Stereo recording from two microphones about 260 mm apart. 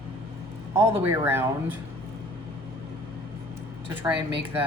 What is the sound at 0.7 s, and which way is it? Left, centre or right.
Speech, centre.